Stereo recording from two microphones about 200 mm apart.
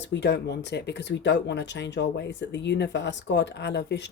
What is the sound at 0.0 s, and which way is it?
Speech, 60° left (ahead or behind).